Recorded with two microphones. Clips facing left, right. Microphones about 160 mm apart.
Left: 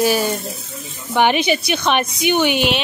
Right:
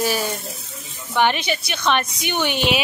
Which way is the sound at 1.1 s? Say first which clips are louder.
Left 4 dB; 15° left (ahead or behind).